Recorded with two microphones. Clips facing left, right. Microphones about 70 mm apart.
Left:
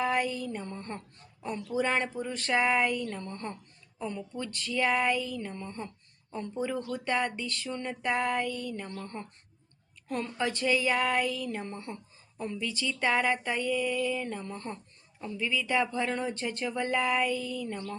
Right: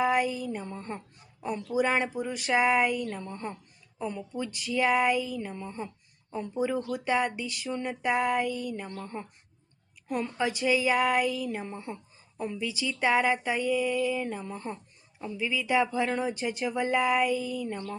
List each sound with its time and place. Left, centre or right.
0.0 s speech: centre